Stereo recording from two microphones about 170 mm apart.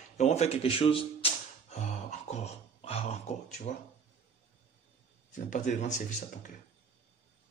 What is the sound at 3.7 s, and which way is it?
Speech, 45° left (ahead or behind).